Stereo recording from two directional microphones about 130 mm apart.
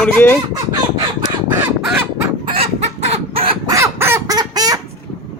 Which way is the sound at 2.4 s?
50° right (ahead or behind).